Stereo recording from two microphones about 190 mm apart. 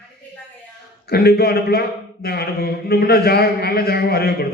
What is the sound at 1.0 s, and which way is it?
A man's voice, 55° left (ahead or behind).